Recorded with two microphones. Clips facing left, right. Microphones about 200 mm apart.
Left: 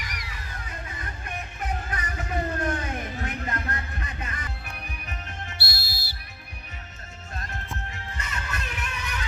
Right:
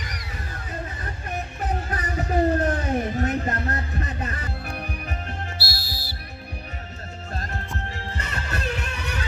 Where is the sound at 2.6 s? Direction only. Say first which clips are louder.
Right 6 dB; 40° right (ahead or behind).